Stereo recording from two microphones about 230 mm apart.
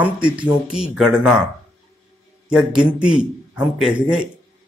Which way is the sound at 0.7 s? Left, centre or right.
Centre.